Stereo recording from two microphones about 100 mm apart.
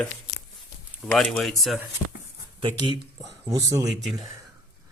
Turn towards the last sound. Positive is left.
turn(degrees=0)  # may be behind; listen again after turning